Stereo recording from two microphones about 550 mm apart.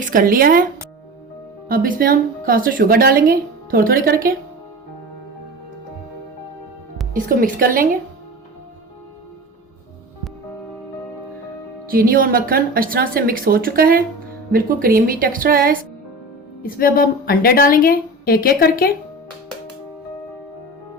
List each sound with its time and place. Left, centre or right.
0.0 s a woman's voice: centre
7.1 s a woman's voice: centre
11.9 s a woman's voice: centre
16.6 s a woman's voice: centre